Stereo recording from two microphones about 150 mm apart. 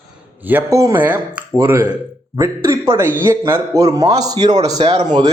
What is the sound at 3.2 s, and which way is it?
A man's voice, 20° right (ahead or behind).